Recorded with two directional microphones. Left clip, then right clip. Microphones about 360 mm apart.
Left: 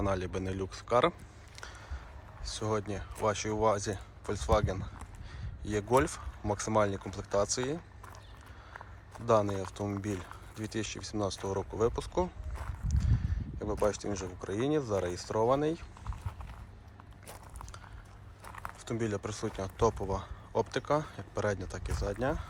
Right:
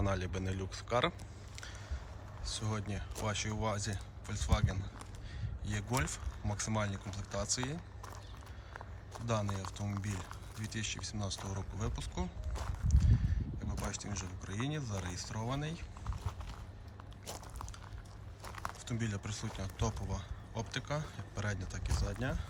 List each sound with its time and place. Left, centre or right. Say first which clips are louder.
0.0 s speech: left 5 dB; centre
2.4 s speech: left 8 dB; centre
17.2 s walk: right 2 dB; centre
18.4 s speech: left 2 dB; centre